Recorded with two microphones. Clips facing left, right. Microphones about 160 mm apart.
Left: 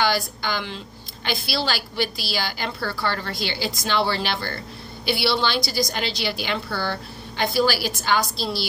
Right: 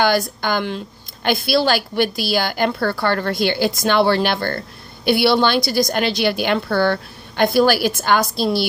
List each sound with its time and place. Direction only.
0.0 s a woman's voice: 50° right (ahead or behind)